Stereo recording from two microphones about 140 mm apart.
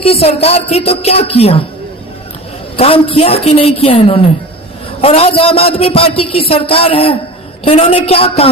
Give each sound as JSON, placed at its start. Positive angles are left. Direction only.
{"t": 0.0, "sound": "a man's voice", "side_deg": 45}
{"t": 2.7, "sound": "a man's voice", "side_deg": 40}